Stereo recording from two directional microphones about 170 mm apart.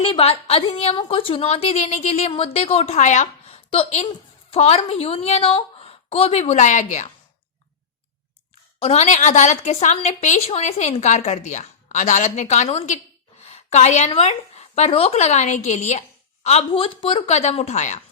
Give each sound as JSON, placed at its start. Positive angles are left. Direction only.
{"t": 0.0, "sound": "a woman's voice", "side_deg": 35}
{"t": 8.8, "sound": "a woman's voice", "side_deg": 40}